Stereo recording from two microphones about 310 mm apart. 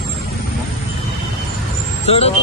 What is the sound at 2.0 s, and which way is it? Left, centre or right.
Speech, centre.